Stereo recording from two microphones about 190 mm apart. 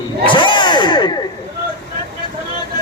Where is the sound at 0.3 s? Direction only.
25° left (ahead or behind).